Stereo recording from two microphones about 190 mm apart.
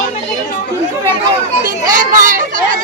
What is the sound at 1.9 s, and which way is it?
Children playing, 45° right (ahead or behind).